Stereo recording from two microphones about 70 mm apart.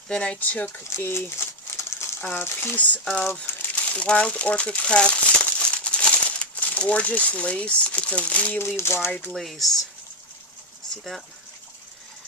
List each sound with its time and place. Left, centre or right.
0.1 s speech: centre
0.9 s crumpling: left
2.3 s speech: left
2.7 s speech: left
8.5 s speech: left
9.3 s speech: centre